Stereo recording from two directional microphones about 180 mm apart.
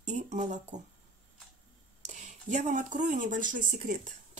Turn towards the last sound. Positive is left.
turn(degrees=-45)  # may be behind; listen again after turning